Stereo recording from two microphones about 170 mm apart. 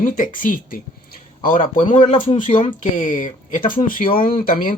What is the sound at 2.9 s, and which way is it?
Speech, 50° left (ahead or behind).